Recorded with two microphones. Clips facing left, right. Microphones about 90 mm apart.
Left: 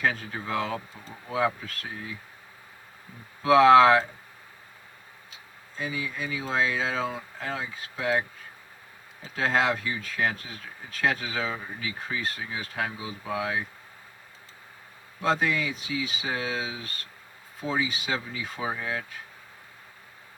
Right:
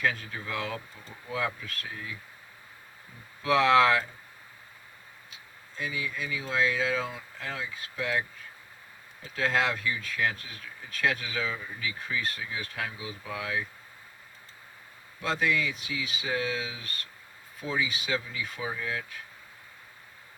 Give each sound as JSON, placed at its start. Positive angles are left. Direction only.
{"t": 0.0, "sound": "speech", "side_deg": 30}
{"t": 3.4, "sound": "speech", "side_deg": 35}
{"t": 5.8, "sound": "speech", "side_deg": 30}
{"t": 9.3, "sound": "speech", "side_deg": 30}
{"t": 15.2, "sound": "speech", "side_deg": 30}